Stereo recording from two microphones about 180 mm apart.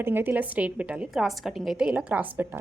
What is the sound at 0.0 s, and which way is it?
A woman's voice, 10° right (ahead or behind).